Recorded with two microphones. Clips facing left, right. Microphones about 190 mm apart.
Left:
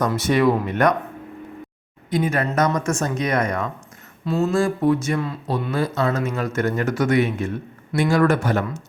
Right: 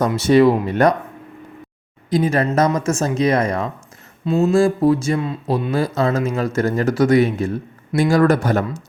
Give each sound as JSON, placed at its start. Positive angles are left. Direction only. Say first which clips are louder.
{"t": 0.1, "sound": "speech", "louder": "right 5 dB", "side_deg": -30}
{"t": 2.0, "sound": "speech", "louder": "right 4 dB", "side_deg": -35}